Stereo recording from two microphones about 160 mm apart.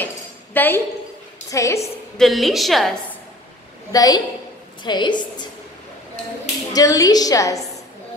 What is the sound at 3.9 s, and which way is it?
A woman's voice, 25° left (ahead or behind).